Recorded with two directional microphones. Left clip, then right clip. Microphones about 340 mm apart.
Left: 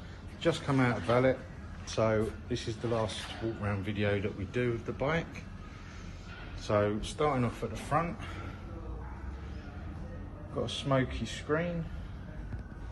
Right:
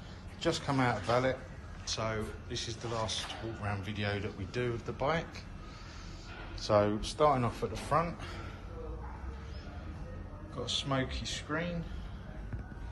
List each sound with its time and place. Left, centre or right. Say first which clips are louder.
0.4 s speech: left 2 dB; centre
0.9 s a man's voice: left 2 dB; centre
2.0 s speech: left 9 dB; centre
2.7 s a man's voice: left 5 dB; centre
3.6 s speech: left 3 dB; centre
6.7 s a man's voice: right 1 dB; centre
10.6 s speech: left 3 dB; centre